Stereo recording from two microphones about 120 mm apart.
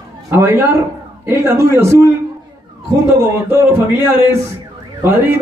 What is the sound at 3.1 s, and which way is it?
A man's voice, 20° right (ahead or behind).